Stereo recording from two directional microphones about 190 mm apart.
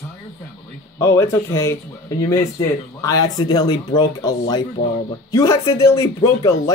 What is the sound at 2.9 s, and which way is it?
Speech, 20° left (ahead or behind).